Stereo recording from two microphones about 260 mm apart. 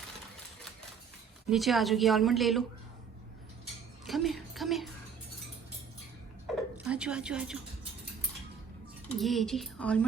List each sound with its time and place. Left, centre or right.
1.5 s a woman's voice: centre
4.0 s music: centre
6.7 s speech: centre
9.1 s a woman's voice: centre